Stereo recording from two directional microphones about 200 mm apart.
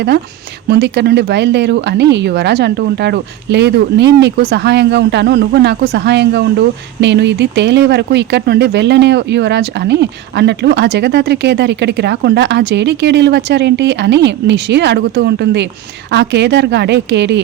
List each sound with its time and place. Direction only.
0.7 s speech: 55° right (ahead or behind)